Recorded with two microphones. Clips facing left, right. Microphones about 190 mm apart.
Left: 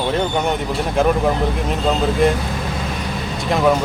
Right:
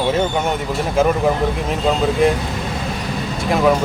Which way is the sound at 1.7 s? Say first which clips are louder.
Right 1 dB; centre (ahead or behind).